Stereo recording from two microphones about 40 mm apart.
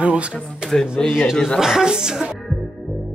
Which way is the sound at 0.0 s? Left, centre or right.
Right.